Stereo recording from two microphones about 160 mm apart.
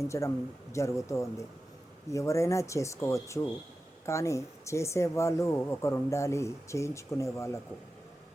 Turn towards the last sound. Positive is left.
turn(degrees=20)  # may be behind; listen again after turning